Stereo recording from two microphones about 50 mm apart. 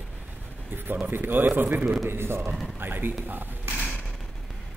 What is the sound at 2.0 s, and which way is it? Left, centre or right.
Speech, right.